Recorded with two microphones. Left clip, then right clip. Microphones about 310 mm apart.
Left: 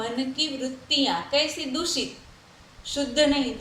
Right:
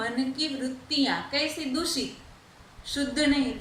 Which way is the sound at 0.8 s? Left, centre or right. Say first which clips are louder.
Left 4 dB; centre.